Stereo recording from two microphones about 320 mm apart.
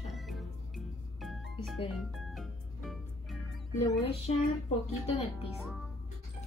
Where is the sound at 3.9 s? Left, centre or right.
Centre.